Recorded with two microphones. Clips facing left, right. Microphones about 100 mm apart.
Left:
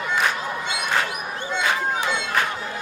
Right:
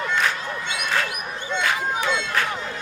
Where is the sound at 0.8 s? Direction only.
20° left (ahead or behind).